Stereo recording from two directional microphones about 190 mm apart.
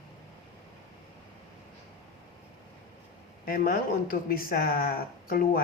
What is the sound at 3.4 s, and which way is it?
A woman's voice, 50° left (ahead or behind).